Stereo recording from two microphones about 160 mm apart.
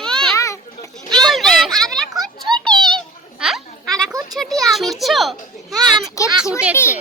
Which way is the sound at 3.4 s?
Centre (ahead or behind).